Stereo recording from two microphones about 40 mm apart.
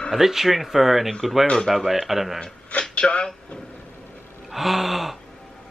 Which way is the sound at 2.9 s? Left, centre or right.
Left.